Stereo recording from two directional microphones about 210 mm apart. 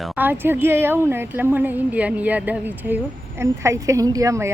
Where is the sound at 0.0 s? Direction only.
10° right (ahead or behind).